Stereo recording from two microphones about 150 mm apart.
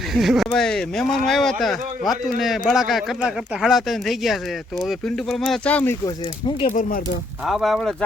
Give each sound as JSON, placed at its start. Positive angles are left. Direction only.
{"t": 0.1, "sound": "speech", "side_deg": 0}
{"t": 6.7, "sound": "speech", "side_deg": 60}
{"t": 7.4, "sound": "speech", "side_deg": 0}